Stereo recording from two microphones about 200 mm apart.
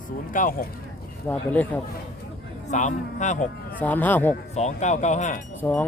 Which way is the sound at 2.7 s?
35° left (ahead or behind).